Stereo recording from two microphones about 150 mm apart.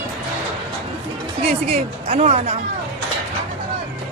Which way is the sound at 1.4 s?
45° right (ahead or behind).